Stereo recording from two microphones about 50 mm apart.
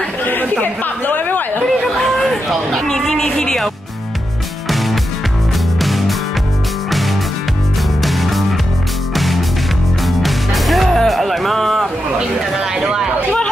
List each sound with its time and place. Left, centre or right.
0.2 s chatter: left
1.7 s chatter: centre
2.8 s speech: centre
4.6 s music: centre
8.0 s music: centre
12.7 s a sound: centre